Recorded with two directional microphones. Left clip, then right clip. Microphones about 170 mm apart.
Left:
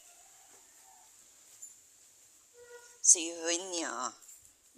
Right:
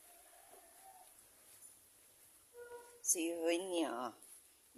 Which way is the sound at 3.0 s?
20° right (ahead or behind).